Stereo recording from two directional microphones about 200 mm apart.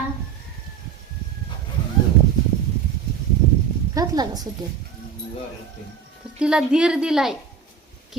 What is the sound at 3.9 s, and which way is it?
Speech, 20° right (ahead or behind).